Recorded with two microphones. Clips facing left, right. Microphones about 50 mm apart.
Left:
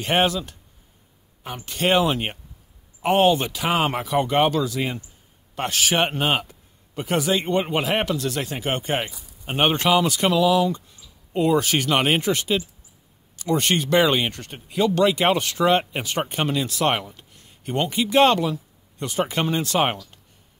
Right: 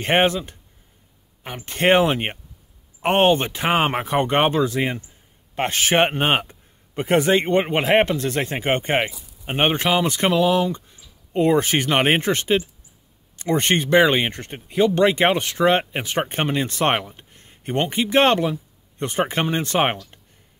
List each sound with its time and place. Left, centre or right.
0.0 s speech: right
9.4 s speech: centre
10.0 s speech: right